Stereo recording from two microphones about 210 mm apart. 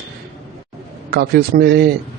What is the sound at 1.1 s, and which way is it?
Speech, 50° right (ahead or behind).